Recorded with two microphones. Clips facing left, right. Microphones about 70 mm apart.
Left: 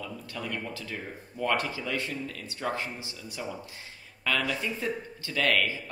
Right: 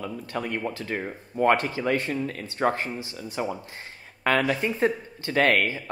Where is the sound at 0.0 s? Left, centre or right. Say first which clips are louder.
Right 6 dB; right.